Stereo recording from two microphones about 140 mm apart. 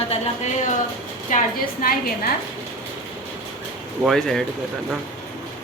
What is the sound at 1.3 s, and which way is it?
Speech, 70° left (ahead or behind).